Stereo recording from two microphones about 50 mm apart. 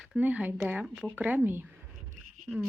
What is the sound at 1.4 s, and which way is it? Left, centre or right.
Speech, right.